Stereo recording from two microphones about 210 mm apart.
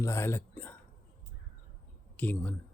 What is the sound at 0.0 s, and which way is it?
Speech, 15° left (ahead or behind).